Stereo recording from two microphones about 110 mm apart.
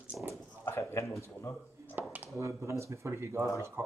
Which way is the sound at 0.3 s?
25° left (ahead or behind).